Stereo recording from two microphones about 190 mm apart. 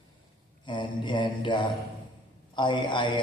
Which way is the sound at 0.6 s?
25° left (ahead or behind).